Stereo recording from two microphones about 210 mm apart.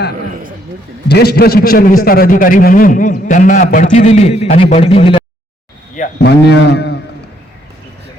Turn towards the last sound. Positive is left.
turn(degrees=55)  # may be behind; listen again after turning